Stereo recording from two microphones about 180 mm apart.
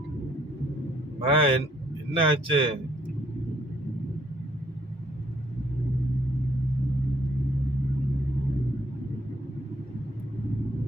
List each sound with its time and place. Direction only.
1.2 s a man's voice: 30° right (ahead or behind)